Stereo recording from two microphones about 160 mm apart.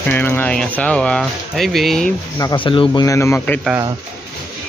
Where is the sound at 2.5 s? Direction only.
35° left (ahead or behind).